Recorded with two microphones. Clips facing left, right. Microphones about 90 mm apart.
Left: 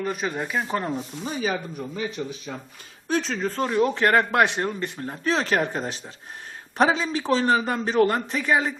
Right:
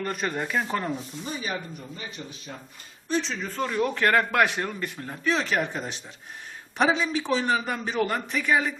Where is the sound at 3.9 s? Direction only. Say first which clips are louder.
Left 2 dB; 20° left (ahead or behind).